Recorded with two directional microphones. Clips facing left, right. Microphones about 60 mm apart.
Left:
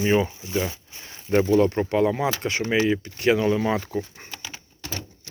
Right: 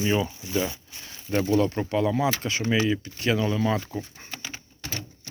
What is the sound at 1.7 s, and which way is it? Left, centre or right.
Speech, left.